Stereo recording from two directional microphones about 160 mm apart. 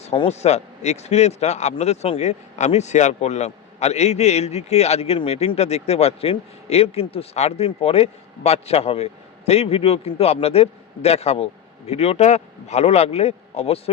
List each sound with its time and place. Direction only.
0.0 s a man's voice: 40° left (ahead or behind)